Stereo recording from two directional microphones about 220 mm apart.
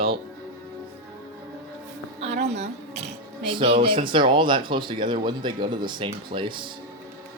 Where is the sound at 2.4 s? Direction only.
30° right (ahead or behind).